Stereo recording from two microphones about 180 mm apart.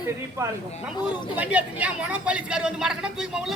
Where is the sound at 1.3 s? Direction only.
10° right (ahead or behind).